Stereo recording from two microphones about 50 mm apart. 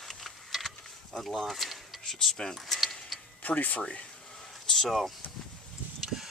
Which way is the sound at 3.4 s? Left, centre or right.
Left.